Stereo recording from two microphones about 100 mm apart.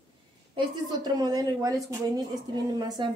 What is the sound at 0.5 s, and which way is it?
A woman's voice, 45° right (ahead or behind).